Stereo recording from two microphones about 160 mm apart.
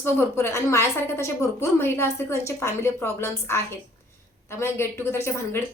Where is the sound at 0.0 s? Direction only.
15° left (ahead or behind).